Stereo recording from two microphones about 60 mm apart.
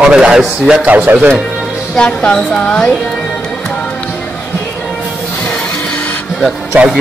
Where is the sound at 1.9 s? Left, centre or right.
Centre.